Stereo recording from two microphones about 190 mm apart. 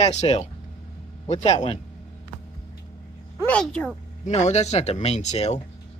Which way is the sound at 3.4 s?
5° left (ahead or behind).